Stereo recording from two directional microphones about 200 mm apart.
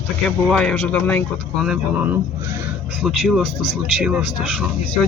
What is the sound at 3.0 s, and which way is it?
Speech, centre (ahead or behind).